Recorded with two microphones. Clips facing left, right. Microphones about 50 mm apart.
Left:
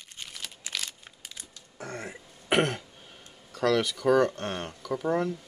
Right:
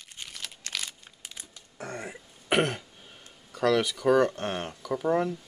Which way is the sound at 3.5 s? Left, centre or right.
Centre.